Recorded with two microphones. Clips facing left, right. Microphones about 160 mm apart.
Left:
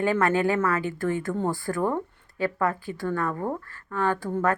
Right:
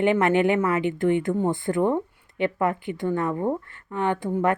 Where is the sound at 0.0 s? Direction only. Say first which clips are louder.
Right 3 dB; 20° right (ahead or behind).